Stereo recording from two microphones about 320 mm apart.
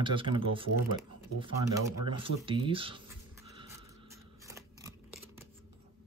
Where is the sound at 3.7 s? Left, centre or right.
Centre.